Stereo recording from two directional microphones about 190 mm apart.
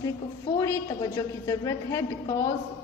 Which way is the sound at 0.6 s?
15° left (ahead or behind).